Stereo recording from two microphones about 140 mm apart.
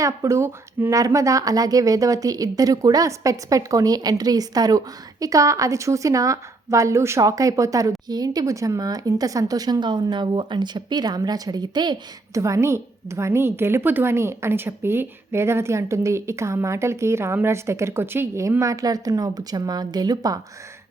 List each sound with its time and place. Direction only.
0.0 s a woman's voice: 20° right (ahead or behind)
12.4 s a woman's voice: 20° right (ahead or behind)